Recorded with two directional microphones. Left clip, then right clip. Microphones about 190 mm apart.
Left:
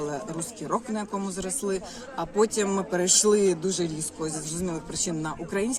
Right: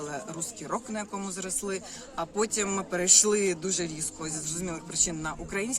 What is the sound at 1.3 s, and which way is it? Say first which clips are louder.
Speech: left 4 dB; 5° right (ahead or behind).